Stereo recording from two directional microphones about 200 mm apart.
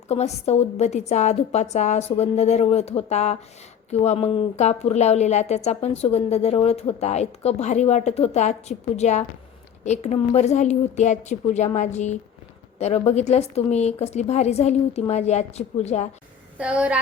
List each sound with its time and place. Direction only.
0.1 s a woman's voice: 30° left (ahead or behind)
16.6 s a woman's voice: 5° right (ahead or behind)